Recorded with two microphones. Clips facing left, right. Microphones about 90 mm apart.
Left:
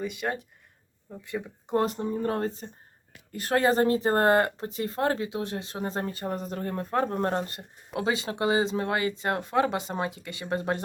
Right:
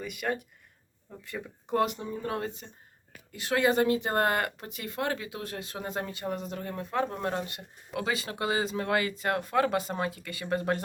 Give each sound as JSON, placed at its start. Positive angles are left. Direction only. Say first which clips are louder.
{"t": 0.0, "sound": "speech", "louder": "left 2 dB", "side_deg": 25}
{"t": 1.8, "sound": "speech", "louder": "left 1 dB", "side_deg": 35}
{"t": 7.9, "sound": "speech", "louder": "left 4 dB", "side_deg": 25}